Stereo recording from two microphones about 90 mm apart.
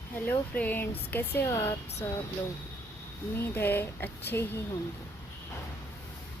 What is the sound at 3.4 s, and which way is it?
Speech, 20° left (ahead or behind).